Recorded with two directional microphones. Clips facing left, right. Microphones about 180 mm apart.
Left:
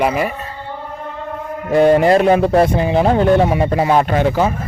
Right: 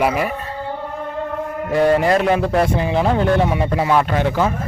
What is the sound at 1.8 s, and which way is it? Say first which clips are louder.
Speech: left 4 dB; 20° left (ahead or behind).